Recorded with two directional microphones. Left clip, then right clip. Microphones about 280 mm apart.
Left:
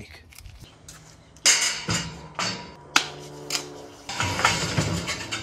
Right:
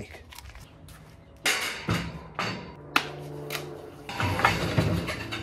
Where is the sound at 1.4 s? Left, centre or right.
Centre.